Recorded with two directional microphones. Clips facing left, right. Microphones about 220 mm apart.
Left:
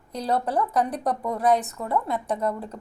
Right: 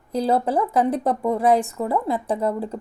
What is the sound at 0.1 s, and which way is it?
A woman's voice, 30° right (ahead or behind).